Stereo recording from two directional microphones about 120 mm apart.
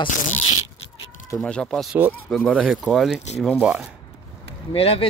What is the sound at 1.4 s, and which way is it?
Speech, 5° left (ahead or behind).